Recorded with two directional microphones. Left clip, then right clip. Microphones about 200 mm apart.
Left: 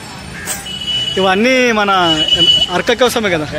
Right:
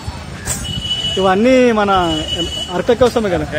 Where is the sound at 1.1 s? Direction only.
10° left (ahead or behind).